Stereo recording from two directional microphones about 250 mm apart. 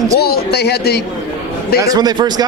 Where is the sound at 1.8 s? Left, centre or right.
Centre.